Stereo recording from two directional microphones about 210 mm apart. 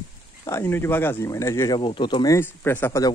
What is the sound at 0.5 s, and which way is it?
Speech, 10° left (ahead or behind).